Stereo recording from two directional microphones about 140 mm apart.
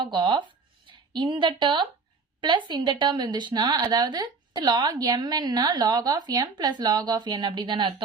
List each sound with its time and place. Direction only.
0.0 s a woman's voice: 35° right (ahead or behind)